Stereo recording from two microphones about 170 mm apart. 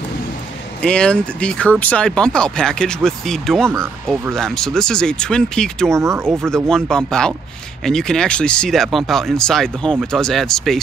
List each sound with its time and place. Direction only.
0.8 s speech: 5° left (ahead or behind)
5.9 s speech: 15° right (ahead or behind)
6.5 s speech: 5° left (ahead or behind)